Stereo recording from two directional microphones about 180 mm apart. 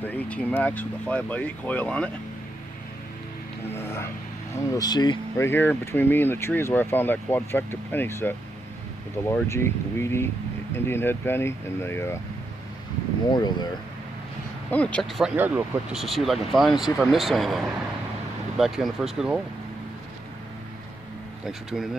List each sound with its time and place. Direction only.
0.0 s speech: 10° left (ahead or behind)
3.6 s speech: 15° left (ahead or behind)
5.5 s speech: 10° left (ahead or behind)
13.3 s speech: 25° left (ahead or behind)
14.7 s speech: 5° left (ahead or behind)
21.5 s speech: centre (ahead or behind)